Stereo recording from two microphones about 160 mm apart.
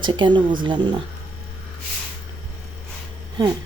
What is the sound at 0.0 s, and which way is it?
Speech, 30° right (ahead or behind).